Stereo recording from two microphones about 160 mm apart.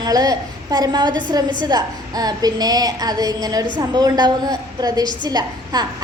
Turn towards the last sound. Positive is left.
turn(degrees=-25)  # may be behind; listen again after turning